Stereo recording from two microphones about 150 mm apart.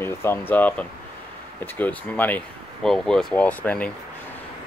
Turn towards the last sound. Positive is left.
turn(degrees=10)  # may be behind; listen again after turning